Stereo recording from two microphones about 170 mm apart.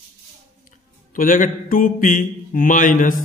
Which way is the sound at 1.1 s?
50° left (ahead or behind).